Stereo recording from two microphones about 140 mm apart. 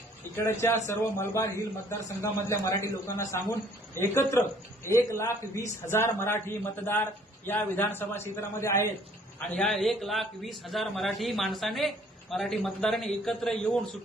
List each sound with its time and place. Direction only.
0.9 s a man's voice: 20° left (ahead or behind)
9.6 s a man's voice: centre (ahead or behind)